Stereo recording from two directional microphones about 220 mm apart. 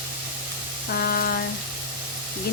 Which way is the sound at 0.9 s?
45° left (ahead or behind).